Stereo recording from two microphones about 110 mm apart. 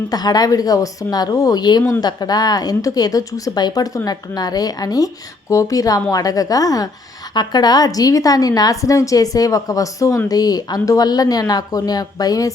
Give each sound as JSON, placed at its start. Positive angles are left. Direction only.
{"t": 0.1, "sound": "speech", "side_deg": 35}